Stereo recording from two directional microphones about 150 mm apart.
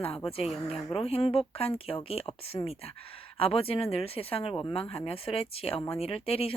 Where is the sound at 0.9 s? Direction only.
40° left (ahead or behind).